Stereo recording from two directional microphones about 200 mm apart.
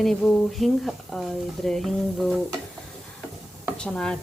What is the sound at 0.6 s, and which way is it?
Speech, centre (ahead or behind).